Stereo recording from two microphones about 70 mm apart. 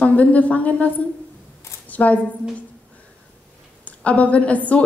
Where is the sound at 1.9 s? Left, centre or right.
Left.